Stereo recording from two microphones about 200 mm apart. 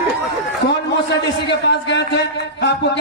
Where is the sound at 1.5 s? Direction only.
60° left (ahead or behind).